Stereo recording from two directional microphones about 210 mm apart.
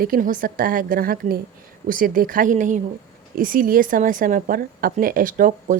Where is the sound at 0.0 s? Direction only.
40° right (ahead or behind).